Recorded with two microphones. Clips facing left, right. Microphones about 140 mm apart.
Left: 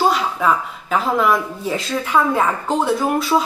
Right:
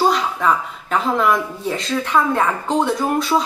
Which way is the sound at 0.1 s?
5° left (ahead or behind).